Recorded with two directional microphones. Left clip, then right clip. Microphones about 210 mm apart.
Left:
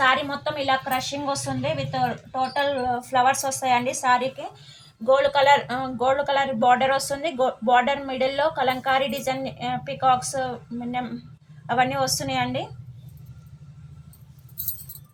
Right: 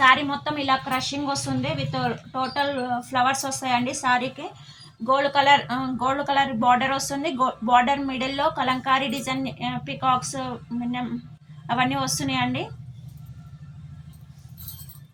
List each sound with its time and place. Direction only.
0.0 s speech: 35° left (ahead or behind)